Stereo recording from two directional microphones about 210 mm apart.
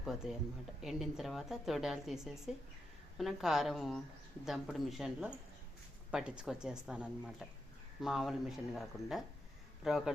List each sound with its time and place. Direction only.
0.0 s a woman's voice: centre (ahead or behind)